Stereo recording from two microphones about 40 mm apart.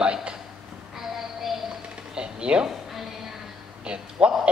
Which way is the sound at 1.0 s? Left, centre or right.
Centre.